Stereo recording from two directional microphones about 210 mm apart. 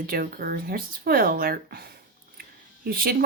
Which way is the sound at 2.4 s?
45° right (ahead or behind).